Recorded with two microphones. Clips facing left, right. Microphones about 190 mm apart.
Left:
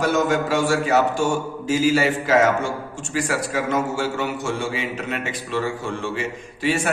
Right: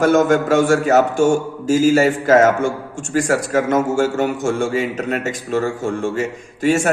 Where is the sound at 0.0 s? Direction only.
50° right (ahead or behind).